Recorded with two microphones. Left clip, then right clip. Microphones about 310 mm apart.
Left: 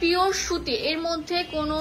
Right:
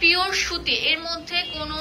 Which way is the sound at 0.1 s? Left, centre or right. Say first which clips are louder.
Right 1 dB; centre.